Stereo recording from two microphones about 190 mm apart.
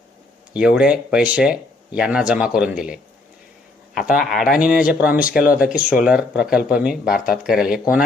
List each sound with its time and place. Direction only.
0.5 s speech: 5° right (ahead or behind)
4.0 s speech: 45° left (ahead or behind)
4.3 s speech: centre (ahead or behind)